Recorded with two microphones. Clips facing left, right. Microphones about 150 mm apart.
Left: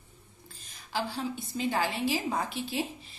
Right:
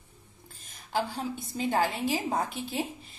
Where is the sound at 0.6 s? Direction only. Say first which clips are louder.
Right 3 dB; 50° right (ahead or behind).